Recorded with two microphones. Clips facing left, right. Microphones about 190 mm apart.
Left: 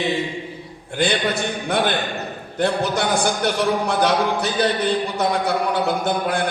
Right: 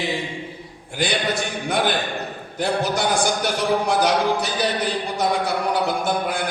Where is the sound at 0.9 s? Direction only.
60° left (ahead or behind).